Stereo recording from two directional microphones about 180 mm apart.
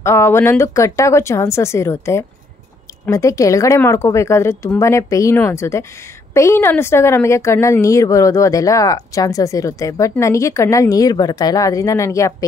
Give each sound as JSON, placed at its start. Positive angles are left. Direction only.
{"t": 0.0, "sound": "a woman's voice", "side_deg": 15}